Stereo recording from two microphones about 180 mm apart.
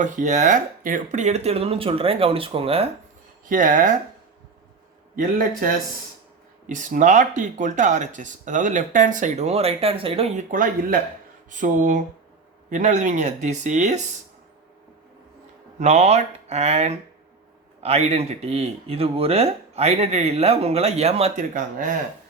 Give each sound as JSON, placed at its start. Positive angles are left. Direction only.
{"t": 0.0, "sound": "speech", "side_deg": -45}
{"t": 3.5, "sound": "speech", "side_deg": -50}
{"t": 6.7, "sound": "speech", "side_deg": -45}
{"t": 15.8, "sound": "speech", "side_deg": -40}